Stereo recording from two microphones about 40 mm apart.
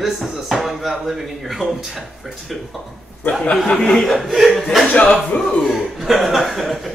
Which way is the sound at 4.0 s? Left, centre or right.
Centre.